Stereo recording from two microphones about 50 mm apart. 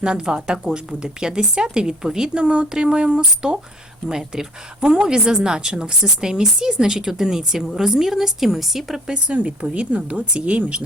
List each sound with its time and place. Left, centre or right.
0.0 s a woman's voice: centre
9.0 s speech: centre